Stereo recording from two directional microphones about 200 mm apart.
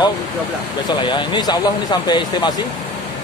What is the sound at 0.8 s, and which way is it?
Speech, 25° left (ahead or behind).